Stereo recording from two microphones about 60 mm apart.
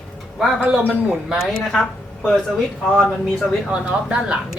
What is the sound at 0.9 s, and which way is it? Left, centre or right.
Speech, centre.